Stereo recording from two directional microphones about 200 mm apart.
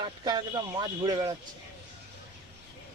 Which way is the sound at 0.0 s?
20° right (ahead or behind).